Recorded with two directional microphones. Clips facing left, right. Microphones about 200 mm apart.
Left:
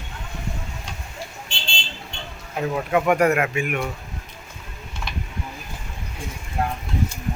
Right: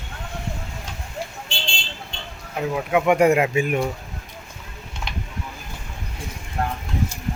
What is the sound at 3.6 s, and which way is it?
Speech, 30° right (ahead or behind).